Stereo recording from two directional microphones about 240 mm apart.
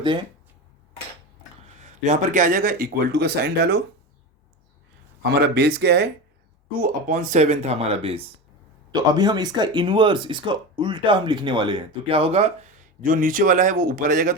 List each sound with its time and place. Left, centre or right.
0.0 s speech: centre
1.8 s speech: right
5.2 s speech: right